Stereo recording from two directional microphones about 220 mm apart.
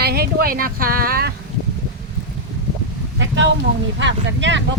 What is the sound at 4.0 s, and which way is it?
Speech, 55° right (ahead or behind).